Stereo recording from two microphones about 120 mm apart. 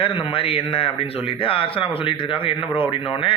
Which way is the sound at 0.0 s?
45° left (ahead or behind).